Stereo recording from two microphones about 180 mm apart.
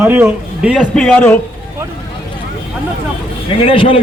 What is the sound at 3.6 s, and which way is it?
Speech, 30° left (ahead or behind).